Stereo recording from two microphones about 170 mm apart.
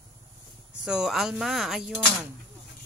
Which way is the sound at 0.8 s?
5° right (ahead or behind).